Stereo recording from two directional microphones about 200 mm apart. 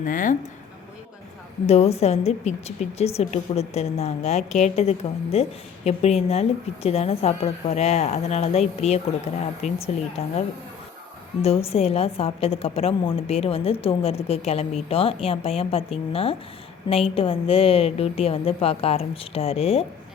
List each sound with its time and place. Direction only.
0.0 s a woman's voice: 40° left (ahead or behind)
1.6 s a woman's voice: 30° left (ahead or behind)
11.7 s a woman's voice: 30° left (ahead or behind)